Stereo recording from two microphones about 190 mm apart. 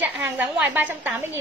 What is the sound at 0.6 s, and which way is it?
Speech, 10° right (ahead or behind).